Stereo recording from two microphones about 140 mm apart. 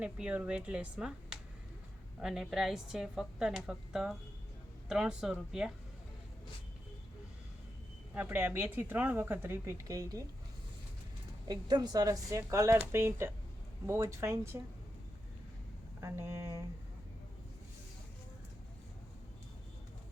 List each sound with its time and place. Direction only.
0.0 s a woman's voice: 10° right (ahead or behind)
8.1 s speech: 10° right (ahead or behind)
11.4 s speech: 30° right (ahead or behind)
16.0 s speech: 20° right (ahead or behind)